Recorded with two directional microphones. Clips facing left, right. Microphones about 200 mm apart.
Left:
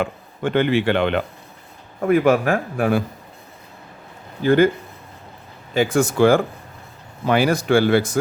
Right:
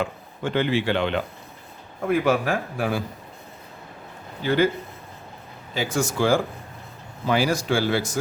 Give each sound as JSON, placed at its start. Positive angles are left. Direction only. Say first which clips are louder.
{"t": 0.0, "sound": "speech", "louder": "left 4 dB", "side_deg": 55}
{"t": 4.4, "sound": "speech", "louder": "left 6 dB", "side_deg": 50}
{"t": 5.7, "sound": "speech", "louder": "left 7 dB", "side_deg": 55}